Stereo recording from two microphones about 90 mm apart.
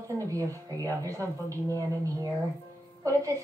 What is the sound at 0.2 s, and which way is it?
Speech, 35° right (ahead or behind).